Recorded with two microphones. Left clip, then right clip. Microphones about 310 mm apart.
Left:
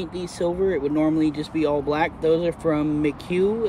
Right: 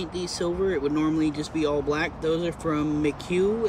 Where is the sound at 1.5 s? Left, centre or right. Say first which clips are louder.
Left 3 dB; centre.